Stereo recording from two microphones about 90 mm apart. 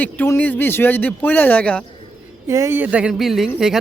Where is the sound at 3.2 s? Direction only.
Centre (ahead or behind).